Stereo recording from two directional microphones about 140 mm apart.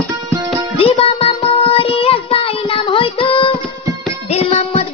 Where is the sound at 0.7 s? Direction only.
45° left (ahead or behind).